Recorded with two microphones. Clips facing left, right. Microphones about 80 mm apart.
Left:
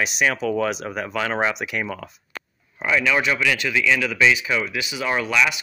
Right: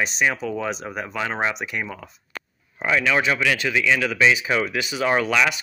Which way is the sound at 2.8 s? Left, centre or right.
Right.